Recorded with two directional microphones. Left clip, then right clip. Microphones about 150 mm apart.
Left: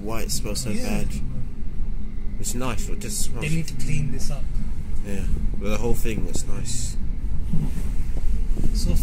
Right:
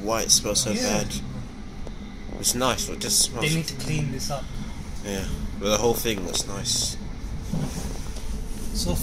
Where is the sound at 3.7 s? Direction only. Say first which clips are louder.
Right 3 dB; 45° right (ahead or behind).